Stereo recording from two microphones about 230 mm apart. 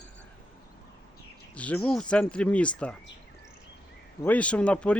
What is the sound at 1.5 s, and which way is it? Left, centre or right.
Speech, centre.